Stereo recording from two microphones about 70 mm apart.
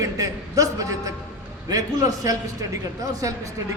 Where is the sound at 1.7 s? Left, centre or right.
Right.